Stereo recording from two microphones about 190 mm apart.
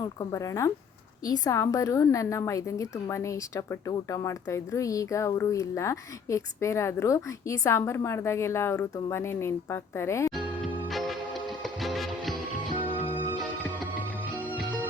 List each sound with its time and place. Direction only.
0.2 s a woman's voice: 15° left (ahead or behind)
10.3 s music: centre (ahead or behind)